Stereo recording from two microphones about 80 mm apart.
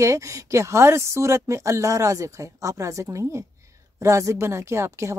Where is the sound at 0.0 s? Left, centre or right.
Right.